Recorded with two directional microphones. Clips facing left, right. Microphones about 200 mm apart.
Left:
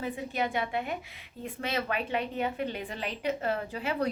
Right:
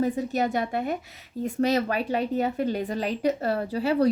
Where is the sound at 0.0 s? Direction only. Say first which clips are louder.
Right 7 dB; 40° right (ahead or behind).